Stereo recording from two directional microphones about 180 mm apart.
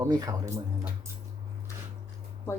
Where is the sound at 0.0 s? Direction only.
20° right (ahead or behind).